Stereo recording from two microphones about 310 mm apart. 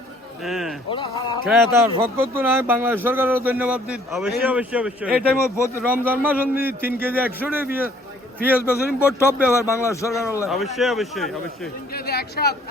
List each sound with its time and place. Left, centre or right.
0.4 s a man's voice: centre
0.9 s a man's voice: centre
1.5 s a man's voice: centre
5.4 s a man's voice: centre
5.9 s a man's voice: centre
8.6 s a man's voice: centre
11.9 s speech: left